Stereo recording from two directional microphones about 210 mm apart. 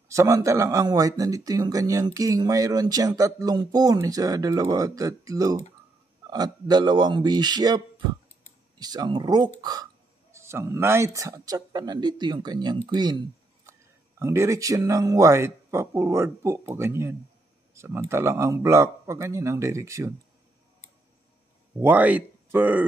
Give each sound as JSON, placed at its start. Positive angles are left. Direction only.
{"t": 0.1, "sound": "speech", "side_deg": -15}
{"t": 14.2, "sound": "speech", "side_deg": -15}
{"t": 21.7, "sound": "speech", "side_deg": -10}